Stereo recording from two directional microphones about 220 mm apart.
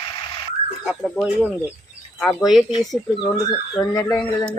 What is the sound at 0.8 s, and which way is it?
Speech, centre (ahead or behind).